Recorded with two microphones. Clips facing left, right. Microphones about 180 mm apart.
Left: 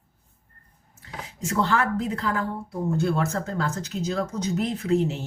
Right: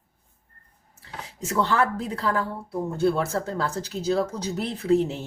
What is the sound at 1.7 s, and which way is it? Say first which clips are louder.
Speech: even; 35° right (ahead or behind).